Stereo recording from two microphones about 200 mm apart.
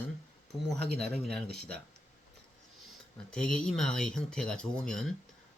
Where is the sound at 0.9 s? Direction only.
55° right (ahead or behind).